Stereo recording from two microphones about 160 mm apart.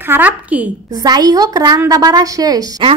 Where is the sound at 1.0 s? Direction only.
25° right (ahead or behind).